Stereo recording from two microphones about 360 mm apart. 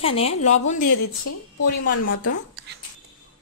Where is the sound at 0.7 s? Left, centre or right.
Left.